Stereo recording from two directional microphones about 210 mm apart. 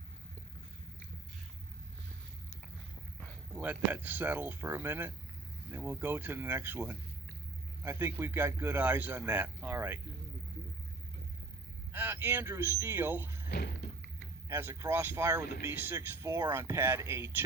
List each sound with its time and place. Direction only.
3.2 s a man's voice: 5° right (ahead or behind)
11.9 s speech: 10° right (ahead or behind)
13.5 s a sound: 50° left (ahead or behind)
14.4 s speech: 15° right (ahead or behind)